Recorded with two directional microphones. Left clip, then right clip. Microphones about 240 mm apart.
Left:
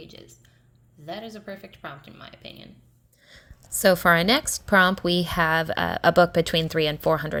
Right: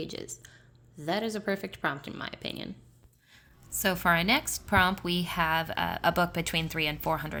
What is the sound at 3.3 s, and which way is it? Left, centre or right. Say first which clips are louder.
A woman's voice: left 5 dB; left.